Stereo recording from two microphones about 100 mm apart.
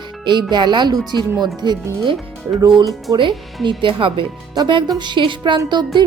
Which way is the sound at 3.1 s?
55° right (ahead or behind).